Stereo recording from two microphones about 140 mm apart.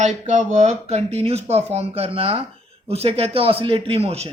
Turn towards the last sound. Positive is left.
turn(degrees=-45)  # may be behind; listen again after turning